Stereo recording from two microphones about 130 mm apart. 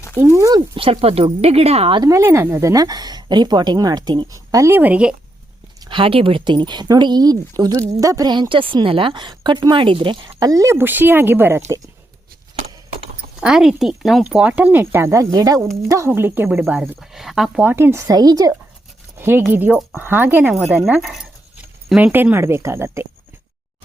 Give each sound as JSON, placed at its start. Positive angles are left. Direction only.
{"t": 0.2, "sound": "speech", "side_deg": -20}
{"t": 0.7, "sound": "speech", "side_deg": -45}
{"t": 2.0, "sound": "speech", "side_deg": -25}
{"t": 4.5, "sound": "speech", "side_deg": -20}
{"t": 5.8, "sound": "speech", "side_deg": -40}
{"t": 10.4, "sound": "speech", "side_deg": -25}
{"t": 13.4, "sound": "speech", "side_deg": -5}
{"t": 17.0, "sound": "speech", "side_deg": 0}
{"t": 17.7, "sound": "speech", "side_deg": -15}
{"t": 19.5, "sound": "speech", "side_deg": -15}
{"t": 20.5, "sound": "speech", "side_deg": -5}